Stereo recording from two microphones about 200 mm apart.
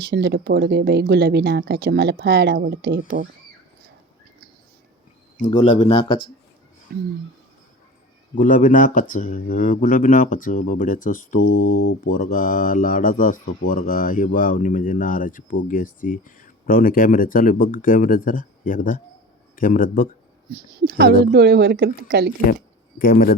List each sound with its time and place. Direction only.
0.1 s speech: 55° right (ahead or behind)
5.5 s speech: 30° left (ahead or behind)
6.9 s speech: 55° right (ahead or behind)
8.4 s speech: 40° left (ahead or behind)
11.3 s mantra: 90° left
12.1 s speech: 45° left (ahead or behind)
20.5 s speech: 55° right (ahead or behind)
23.0 s speech: 45° left (ahead or behind)